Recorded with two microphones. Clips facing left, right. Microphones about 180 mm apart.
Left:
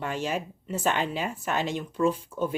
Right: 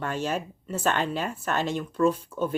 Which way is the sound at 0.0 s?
15° left (ahead or behind).